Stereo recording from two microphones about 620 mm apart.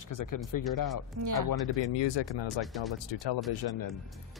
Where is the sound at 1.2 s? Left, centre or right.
Right.